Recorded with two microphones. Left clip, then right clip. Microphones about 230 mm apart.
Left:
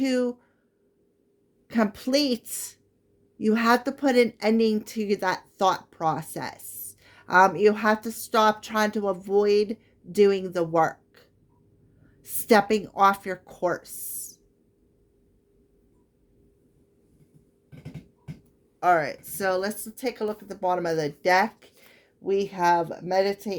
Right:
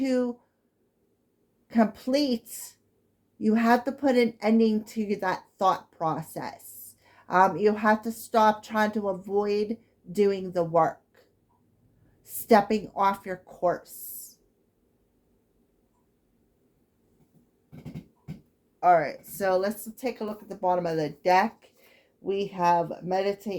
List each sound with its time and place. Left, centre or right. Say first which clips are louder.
0.0 s a woman's voice: left 2 dB; left
1.6 s a woman's voice: right 1 dB; left
18.8 s a woman's voice: right 1 dB; left